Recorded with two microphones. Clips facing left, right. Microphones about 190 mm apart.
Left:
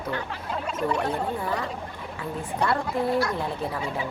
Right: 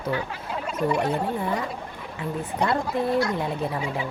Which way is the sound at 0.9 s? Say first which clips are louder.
Right 3 dB; 10° right (ahead or behind).